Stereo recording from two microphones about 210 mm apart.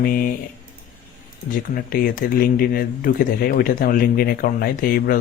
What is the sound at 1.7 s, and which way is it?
Speech, 45° left (ahead or behind).